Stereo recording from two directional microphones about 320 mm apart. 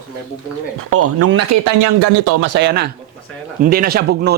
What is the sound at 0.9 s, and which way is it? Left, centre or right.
Speech, right.